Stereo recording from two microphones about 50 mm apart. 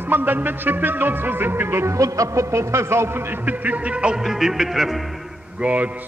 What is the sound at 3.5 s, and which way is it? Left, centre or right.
Speech, right.